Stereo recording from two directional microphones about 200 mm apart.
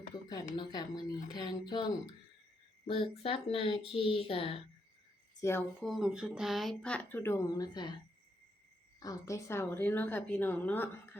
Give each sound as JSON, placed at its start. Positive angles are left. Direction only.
{"t": 0.1, "sound": "speech", "side_deg": 20}
{"t": 2.8, "sound": "speech", "side_deg": 25}
{"t": 5.4, "sound": "speech", "side_deg": 10}
{"t": 5.8, "sound": "speech", "side_deg": 0}
{"t": 9.0, "sound": "a woman's voice", "side_deg": 15}